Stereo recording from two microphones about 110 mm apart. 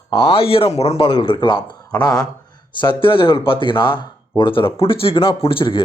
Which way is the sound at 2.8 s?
50° left (ahead or behind).